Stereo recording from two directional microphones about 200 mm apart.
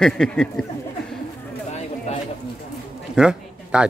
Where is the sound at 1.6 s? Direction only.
35° left (ahead or behind).